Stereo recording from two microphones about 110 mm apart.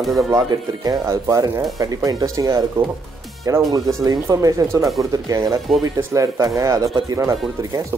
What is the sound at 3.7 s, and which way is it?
Speech, 35° right (ahead or behind).